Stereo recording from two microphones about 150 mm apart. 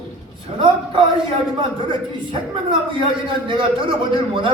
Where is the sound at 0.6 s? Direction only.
35° right (ahead or behind).